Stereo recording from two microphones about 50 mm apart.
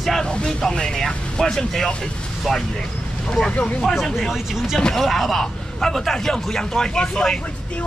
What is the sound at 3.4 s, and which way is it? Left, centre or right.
Speech, centre.